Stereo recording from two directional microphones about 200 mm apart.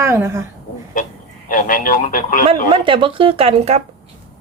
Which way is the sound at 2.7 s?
25° right (ahead or behind).